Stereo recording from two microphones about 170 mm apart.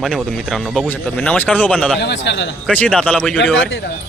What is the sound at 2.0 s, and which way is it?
Speech, 90° left.